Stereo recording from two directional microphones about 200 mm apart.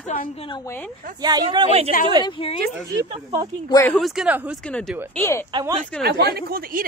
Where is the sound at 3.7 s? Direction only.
10° left (ahead or behind).